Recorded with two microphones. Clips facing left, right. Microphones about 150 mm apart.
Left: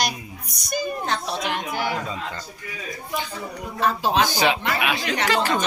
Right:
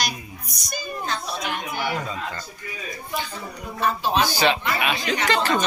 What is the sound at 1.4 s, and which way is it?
Chatter, 90° left.